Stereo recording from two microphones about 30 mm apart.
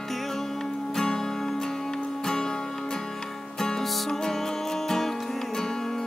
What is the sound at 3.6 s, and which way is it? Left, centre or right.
Music, centre.